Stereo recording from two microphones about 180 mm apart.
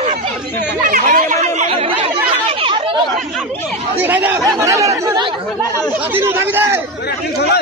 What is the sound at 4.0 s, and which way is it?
Speech, 10° right (ahead or behind).